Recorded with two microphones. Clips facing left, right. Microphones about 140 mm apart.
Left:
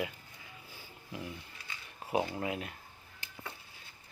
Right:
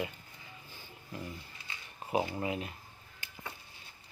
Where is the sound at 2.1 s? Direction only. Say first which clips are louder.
Even; centre (ahead or behind).